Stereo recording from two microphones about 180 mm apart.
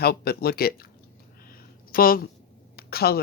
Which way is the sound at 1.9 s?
55° left (ahead or behind).